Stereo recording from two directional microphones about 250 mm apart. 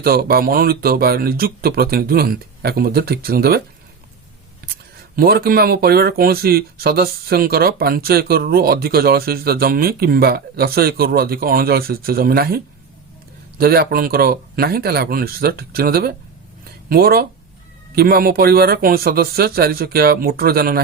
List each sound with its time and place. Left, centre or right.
0.0 s speech: right
5.1 s speech: right